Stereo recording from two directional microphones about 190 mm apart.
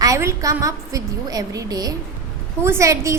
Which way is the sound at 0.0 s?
15° right (ahead or behind).